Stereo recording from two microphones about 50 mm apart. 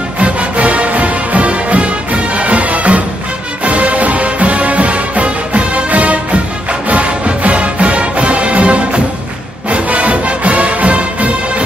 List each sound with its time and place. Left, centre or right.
0.2 s music: right